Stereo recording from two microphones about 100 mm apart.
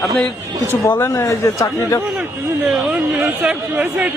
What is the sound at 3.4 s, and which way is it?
Speech, 15° right (ahead or behind).